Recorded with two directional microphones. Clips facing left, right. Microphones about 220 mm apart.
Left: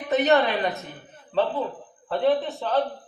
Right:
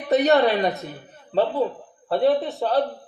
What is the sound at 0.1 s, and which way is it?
Speech, 35° right (ahead or behind).